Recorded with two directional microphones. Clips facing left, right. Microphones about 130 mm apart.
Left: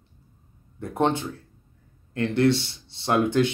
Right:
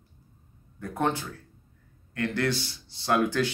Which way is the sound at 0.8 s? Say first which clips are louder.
Left 4 dB; 25° left (ahead or behind).